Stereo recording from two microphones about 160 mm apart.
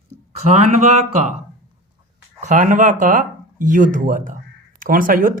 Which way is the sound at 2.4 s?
50° right (ahead or behind).